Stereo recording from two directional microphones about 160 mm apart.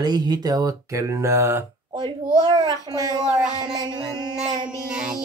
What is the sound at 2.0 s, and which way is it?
Child singing, 25° right (ahead or behind).